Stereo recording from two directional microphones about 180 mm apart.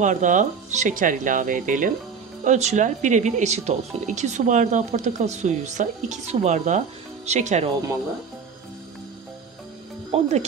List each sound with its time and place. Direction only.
0.0 s speech: 45° right (ahead or behind)
10.1 s music: 35° right (ahead or behind)